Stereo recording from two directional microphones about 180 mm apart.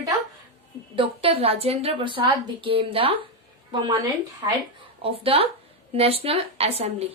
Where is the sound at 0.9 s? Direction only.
30° right (ahead or behind).